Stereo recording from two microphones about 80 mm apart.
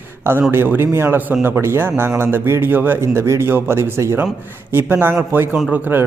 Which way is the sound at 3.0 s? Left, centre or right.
Right.